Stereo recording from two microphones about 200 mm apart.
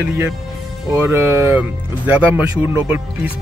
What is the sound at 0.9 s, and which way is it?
Speech, 10° right (ahead or behind).